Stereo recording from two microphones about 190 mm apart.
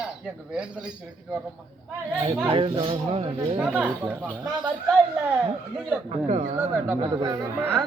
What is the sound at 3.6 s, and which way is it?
Speech, 5° right (ahead or behind).